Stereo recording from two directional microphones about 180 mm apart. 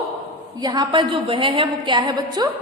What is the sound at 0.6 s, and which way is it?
A woman's voice, 25° right (ahead or behind).